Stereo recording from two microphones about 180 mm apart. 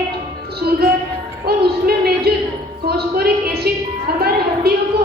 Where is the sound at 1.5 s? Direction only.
60° right (ahead or behind).